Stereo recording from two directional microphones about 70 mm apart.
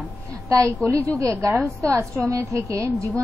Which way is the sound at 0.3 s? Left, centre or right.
Right.